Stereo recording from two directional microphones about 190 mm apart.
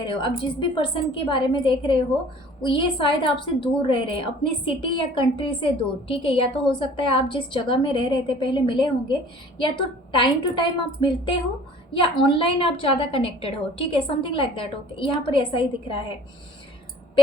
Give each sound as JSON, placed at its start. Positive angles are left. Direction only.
{"t": 0.0, "sound": "a woman's voice", "side_deg": 25}